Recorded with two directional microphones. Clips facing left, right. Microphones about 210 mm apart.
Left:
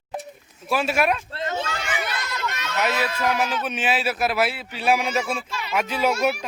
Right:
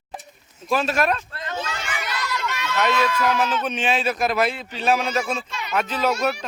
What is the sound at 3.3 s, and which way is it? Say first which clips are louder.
A man's voice: right 2 dB; 10° left (ahead or behind).